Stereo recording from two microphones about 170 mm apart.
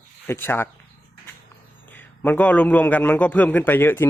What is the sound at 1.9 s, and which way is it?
A man's voice, 10° left (ahead or behind).